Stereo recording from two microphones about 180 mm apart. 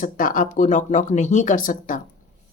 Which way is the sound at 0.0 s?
50° left (ahead or behind).